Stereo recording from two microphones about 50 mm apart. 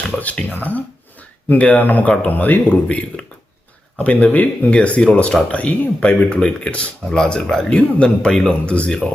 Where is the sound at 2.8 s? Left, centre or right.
Centre.